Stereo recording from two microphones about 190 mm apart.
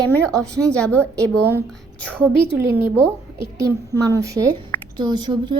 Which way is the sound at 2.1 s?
10° right (ahead or behind).